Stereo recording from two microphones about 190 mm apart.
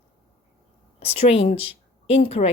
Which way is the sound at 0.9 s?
30° left (ahead or behind).